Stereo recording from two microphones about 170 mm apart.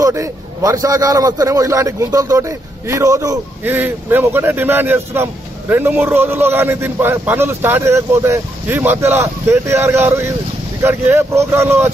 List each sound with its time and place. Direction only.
0.0 s a man's voice: 20° right (ahead or behind)